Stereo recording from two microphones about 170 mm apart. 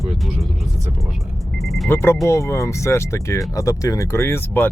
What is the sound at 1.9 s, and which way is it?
Speech, 15° left (ahead or behind).